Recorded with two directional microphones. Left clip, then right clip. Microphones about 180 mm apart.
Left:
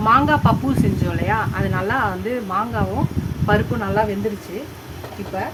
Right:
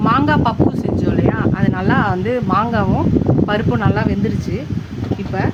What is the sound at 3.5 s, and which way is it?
Speech, 45° right (ahead or behind).